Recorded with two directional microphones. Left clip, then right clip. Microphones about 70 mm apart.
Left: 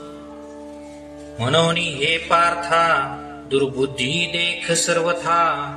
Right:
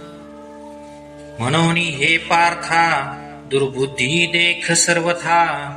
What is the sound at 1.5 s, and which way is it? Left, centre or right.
Speech, right.